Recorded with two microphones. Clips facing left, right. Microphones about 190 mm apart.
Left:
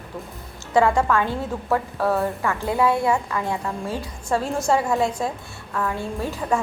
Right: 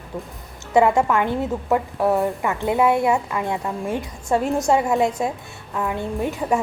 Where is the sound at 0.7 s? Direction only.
20° right (ahead or behind).